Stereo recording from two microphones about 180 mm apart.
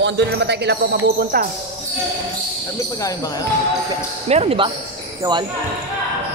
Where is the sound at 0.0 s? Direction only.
70° right (ahead or behind).